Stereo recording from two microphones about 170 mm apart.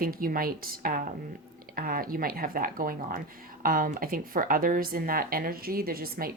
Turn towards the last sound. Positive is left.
turn(degrees=-60)  # may be behind; listen again after turning